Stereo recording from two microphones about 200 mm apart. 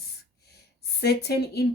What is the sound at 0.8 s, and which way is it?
Speech, 55° left (ahead or behind).